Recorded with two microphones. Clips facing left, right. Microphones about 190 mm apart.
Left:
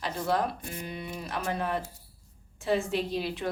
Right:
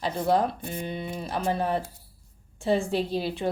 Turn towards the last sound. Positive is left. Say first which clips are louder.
# right 3 dB
turn(degrees=-30)  # may be behind; listen again after turning